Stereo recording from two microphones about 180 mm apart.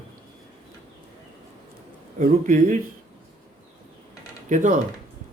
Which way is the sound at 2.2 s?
50° right (ahead or behind).